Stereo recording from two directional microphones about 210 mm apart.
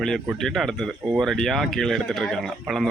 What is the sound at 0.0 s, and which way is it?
Speech, centre (ahead or behind).